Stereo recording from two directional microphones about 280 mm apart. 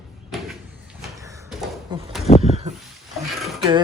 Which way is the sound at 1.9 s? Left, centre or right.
Centre.